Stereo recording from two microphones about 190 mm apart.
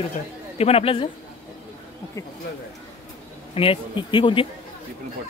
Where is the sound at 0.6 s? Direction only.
30° left (ahead or behind).